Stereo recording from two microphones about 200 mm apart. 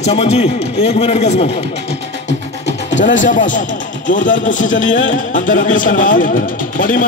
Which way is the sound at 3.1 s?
40° left (ahead or behind).